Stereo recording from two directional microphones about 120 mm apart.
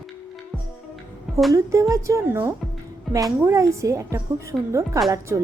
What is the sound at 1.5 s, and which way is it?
A woman's voice, 25° right (ahead or behind).